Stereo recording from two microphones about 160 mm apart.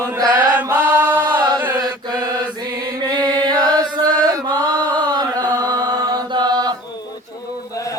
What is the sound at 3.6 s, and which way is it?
Chant, 25° right (ahead or behind).